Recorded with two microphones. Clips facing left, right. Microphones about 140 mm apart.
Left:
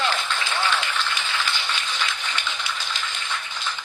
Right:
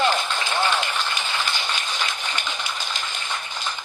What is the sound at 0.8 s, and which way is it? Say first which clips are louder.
Speech: right 1 dB; 45° right (ahead or behind).